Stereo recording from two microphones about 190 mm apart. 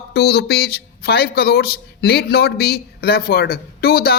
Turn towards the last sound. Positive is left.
turn(degrees=55)  # may be behind; listen again after turning